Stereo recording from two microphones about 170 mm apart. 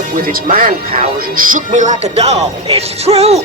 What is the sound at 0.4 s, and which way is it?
Speech, 50° right (ahead or behind).